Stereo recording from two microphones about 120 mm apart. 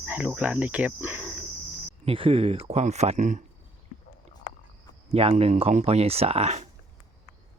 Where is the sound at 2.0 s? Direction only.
50° right (ahead or behind); by 3.4 s 80° right.